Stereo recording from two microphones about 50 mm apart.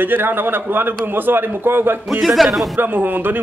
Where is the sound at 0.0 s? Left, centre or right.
Right.